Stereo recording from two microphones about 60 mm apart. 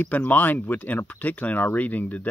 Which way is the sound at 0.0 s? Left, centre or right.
Left.